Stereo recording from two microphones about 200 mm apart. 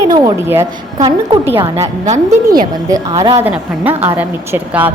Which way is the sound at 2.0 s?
35° right (ahead or behind).